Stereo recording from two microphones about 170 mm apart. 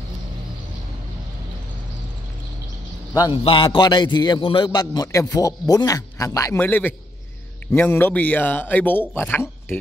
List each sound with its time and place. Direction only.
3.2 s speech: 30° left (ahead or behind); by 9.8 s 15° left (ahead or behind)